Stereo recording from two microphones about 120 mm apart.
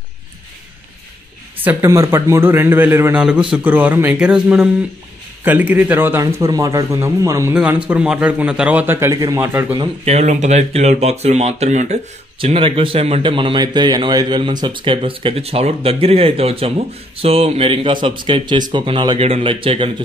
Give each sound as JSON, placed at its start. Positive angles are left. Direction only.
{"t": 1.6, "sound": "a man's voice", "side_deg": -15}
{"t": 7.5, "sound": "a man's voice", "side_deg": -10}
{"t": 10.0, "sound": "speech", "side_deg": -75}
{"t": 12.4, "sound": "a man's voice", "side_deg": -50}